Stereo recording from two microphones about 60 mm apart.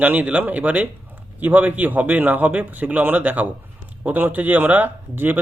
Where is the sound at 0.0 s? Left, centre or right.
Right.